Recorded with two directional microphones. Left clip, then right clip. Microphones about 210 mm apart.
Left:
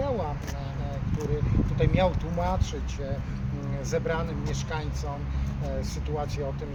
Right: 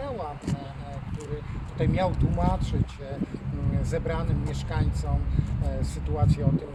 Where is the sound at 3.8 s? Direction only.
Centre (ahead or behind).